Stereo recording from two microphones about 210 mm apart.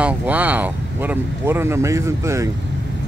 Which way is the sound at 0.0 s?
10° right (ahead or behind).